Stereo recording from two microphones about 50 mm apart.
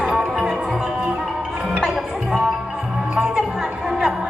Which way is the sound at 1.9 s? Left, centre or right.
Centre.